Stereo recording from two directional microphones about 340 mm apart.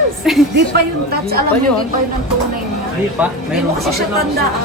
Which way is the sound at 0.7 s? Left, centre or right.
Right.